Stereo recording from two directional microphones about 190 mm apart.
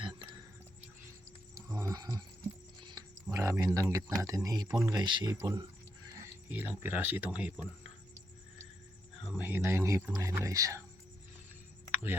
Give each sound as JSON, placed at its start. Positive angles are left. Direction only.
{"t": 0.0, "sound": "a sound", "side_deg": -25}
{"t": 1.5, "sound": "wild animals", "side_deg": -15}
{"t": 2.8, "sound": "speech", "side_deg": -20}
{"t": 9.4, "sound": "speech", "side_deg": -10}